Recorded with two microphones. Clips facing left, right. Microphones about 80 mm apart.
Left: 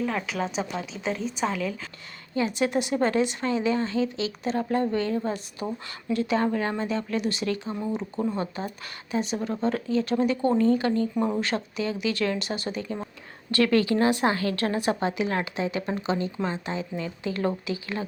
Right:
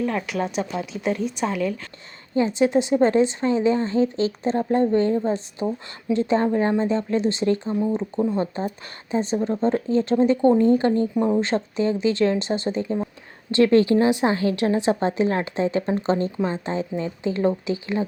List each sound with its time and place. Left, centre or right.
0.0 s speech: centre
2.3 s a woman's voice: right